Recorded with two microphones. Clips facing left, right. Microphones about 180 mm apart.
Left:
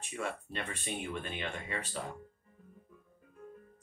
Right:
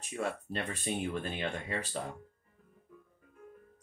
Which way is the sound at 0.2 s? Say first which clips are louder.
Right 3 dB; 40° right (ahead or behind).